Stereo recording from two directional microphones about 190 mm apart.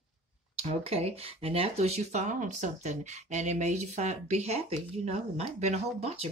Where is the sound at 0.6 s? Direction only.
30° right (ahead or behind).